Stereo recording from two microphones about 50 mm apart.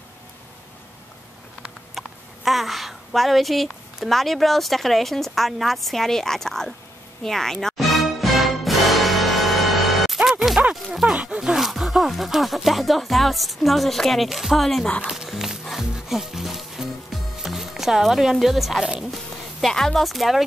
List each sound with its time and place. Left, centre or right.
2.0 s speech: centre
7.2 s music: centre
10.6 s a sound: right
11.2 s a woman's voice: centre
15.0 s speech: centre
15.6 s music: centre
19.6 s a woman's voice: centre